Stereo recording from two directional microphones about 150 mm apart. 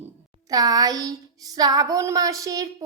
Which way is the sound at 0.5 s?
25° right (ahead or behind).